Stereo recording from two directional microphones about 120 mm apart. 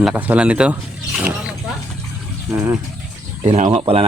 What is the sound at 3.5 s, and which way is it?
Speech, 70° right (ahead or behind).